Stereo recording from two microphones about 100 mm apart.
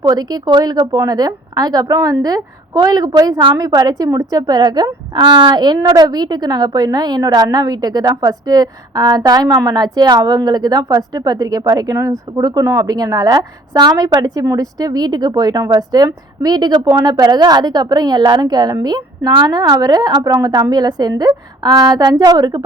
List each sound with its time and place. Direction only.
0.1 s a woman's voice: 40° right (ahead or behind)